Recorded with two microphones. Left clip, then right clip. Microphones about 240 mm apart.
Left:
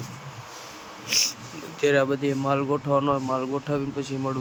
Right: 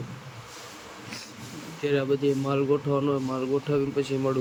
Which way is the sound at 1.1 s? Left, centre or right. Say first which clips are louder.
Left 19 dB; left.